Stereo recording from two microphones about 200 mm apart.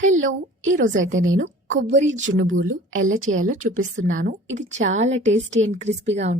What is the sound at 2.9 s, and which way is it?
A woman's voice, 40° right (ahead or behind).